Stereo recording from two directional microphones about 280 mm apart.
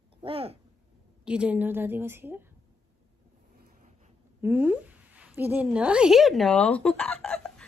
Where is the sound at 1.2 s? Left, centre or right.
Centre.